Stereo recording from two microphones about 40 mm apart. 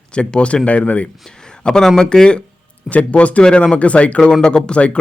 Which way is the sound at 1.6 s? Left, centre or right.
Centre.